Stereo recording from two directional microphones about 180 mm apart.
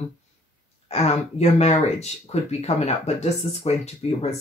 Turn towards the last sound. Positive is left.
turn(degrees=35)  # may be behind; listen again after turning